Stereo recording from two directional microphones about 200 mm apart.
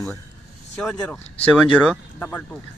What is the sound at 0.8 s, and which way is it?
A man's voice, 5° left (ahead or behind).